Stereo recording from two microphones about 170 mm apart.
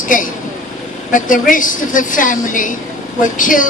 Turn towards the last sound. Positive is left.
turn(degrees=50)  # may be behind; listen again after turning